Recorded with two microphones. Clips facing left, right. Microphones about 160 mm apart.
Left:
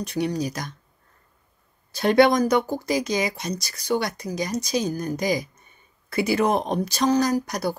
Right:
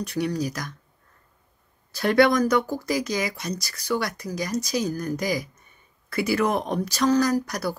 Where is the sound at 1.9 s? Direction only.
20° left (ahead or behind).